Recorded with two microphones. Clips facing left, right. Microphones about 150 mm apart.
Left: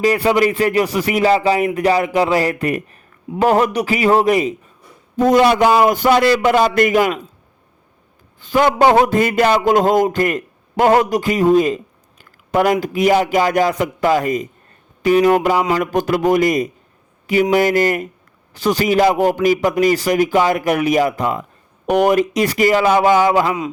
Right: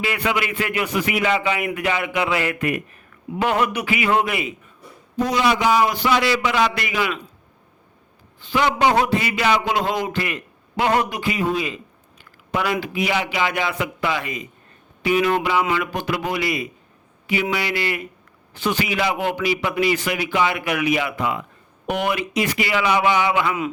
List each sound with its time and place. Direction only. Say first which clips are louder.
0.0 s a man's voice: left 9 dB; 40° left (ahead or behind)
5.1 s a man's voice: left 7 dB; 50° left (ahead or behind)
8.4 s a man's voice: left 6 dB; 45° left (ahead or behind)